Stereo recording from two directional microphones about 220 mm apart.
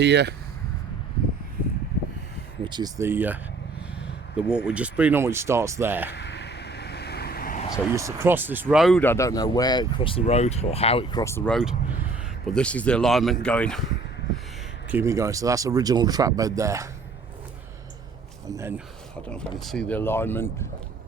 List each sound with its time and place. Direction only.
0.0 s speech: 50° right (ahead or behind)
2.6 s speech: 20° right (ahead or behind)
6.1 s vehicle: 50° left (ahead or behind)
7.9 s speech: 10° right (ahead or behind); by 13.8 s 5° left (ahead or behind)
14.8 s speech: 10° right (ahead or behind)
18.4 s speech: 15° right (ahead or behind)
19.2 s speech: 5° left (ahead or behind)